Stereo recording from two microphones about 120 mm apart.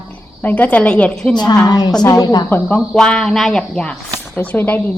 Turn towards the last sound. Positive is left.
turn(degrees=15)  # may be behind; listen again after turning